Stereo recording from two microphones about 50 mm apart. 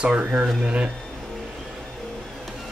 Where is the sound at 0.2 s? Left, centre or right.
Right.